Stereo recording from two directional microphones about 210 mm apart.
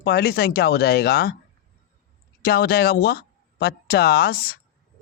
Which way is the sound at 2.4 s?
50° left (ahead or behind).